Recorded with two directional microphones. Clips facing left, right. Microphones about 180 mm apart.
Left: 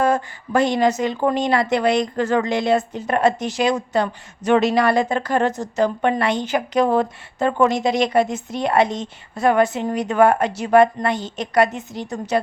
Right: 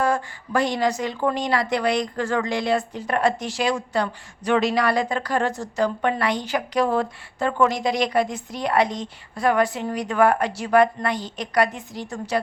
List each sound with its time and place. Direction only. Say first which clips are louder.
0.0 s a woman's voice: left 4 dB; 20° left (ahead or behind)